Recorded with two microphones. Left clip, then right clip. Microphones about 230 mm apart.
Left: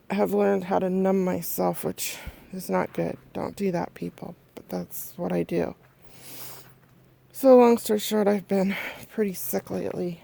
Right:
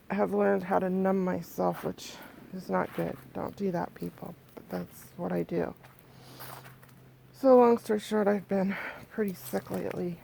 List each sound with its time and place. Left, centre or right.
0.1 s speech: left
6.2 s a sound: left
7.3 s speech: left